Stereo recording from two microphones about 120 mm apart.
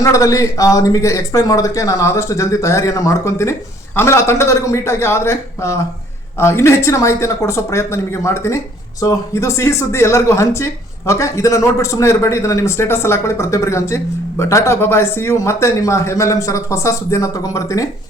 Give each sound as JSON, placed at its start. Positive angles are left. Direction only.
{"t": 0.0, "sound": "speech", "side_deg": 30}